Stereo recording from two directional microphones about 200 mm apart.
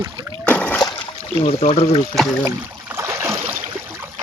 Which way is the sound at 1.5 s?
30° left (ahead or behind).